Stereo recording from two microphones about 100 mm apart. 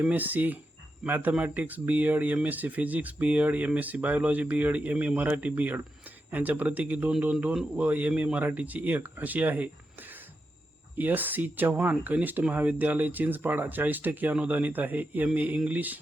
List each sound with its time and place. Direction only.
0.0 s speech: 15° right (ahead or behind)
10.9 s speech: 20° right (ahead or behind)